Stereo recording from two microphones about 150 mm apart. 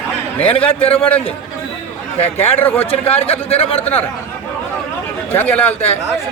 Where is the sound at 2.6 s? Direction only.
15° left (ahead or behind).